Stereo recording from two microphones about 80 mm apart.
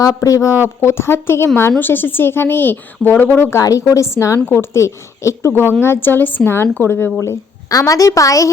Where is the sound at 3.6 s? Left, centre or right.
Left.